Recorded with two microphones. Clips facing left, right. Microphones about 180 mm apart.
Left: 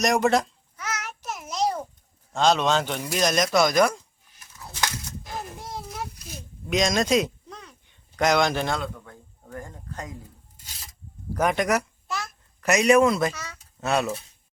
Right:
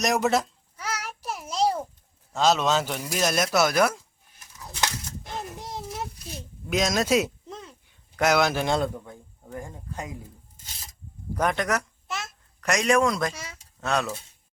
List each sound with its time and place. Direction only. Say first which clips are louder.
0.0 s speech: left 2 dB; centre (ahead or behind)
0.8 s a sound: even; 30° right (ahead or behind)
2.3 s speech: left 1 dB; 5° right (ahead or behind)
5.3 s a sound: even; centre (ahead or behind)
6.7 s speech: left 1 dB; 5° right (ahead or behind)
7.5 s a sound: right 3 dB; 25° right (ahead or behind)
7.9 s a sound: even; 5° right (ahead or behind)
9.4 s speech: right 1 dB; 10° right (ahead or behind)
11.3 s speech: left 3 dB; 10° left (ahead or behind)
12.0 s babbling: left 2 dB; 25° right (ahead or behind)
12.5 s speech: left 4 dB; 10° left (ahead or behind)
13.3 s speech: left 1 dB; 30° right (ahead or behind)
13.8 s speech: left 2 dB; 5° left (ahead or behind)